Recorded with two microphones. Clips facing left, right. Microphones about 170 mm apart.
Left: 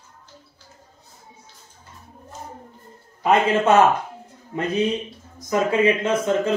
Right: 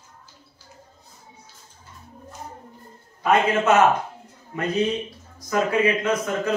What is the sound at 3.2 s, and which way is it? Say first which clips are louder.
Speech: left 2 dB; 30° left (ahead or behind).